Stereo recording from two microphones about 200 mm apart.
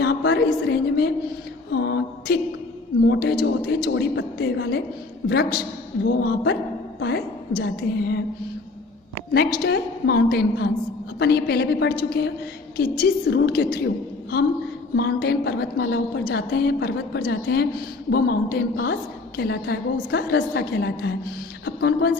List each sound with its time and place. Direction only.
0.0 s a woman's voice: 55° left (ahead or behind)
1.7 s a sound: 60° left (ahead or behind)
3.1 s a woman's voice: 55° left (ahead or behind)
9.3 s a woman's voice: 50° left (ahead or behind)